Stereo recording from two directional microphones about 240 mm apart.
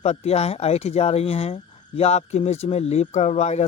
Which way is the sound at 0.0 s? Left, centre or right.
Left.